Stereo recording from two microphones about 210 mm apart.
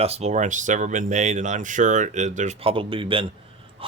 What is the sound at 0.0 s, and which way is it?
Speech, 30° right (ahead or behind).